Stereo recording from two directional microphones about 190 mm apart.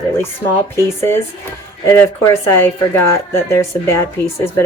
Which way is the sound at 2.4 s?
15° left (ahead or behind).